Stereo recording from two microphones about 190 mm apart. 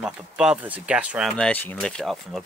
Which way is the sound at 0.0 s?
5° right (ahead or behind).